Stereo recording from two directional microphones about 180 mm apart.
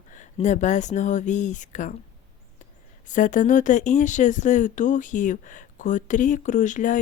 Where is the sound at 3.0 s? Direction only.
45° left (ahead or behind).